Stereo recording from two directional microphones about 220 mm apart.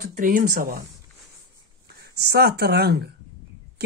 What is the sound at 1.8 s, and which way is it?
Speech, 50° right (ahead or behind).